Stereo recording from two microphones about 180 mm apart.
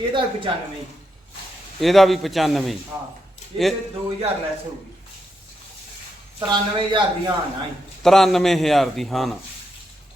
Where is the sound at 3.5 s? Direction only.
30° right (ahead or behind).